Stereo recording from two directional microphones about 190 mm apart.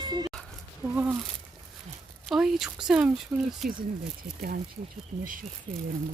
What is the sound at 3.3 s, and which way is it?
Speech, 15° right (ahead or behind).